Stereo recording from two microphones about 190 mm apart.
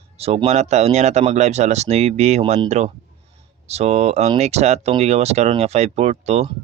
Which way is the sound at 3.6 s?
35° right (ahead or behind).